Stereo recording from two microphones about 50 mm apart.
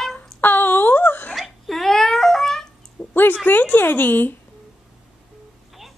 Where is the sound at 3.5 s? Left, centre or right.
Left.